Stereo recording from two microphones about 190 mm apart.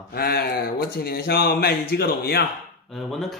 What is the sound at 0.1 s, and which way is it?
Speech, 55° left (ahead or behind).